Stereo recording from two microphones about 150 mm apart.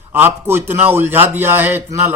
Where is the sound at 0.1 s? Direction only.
15° right (ahead or behind).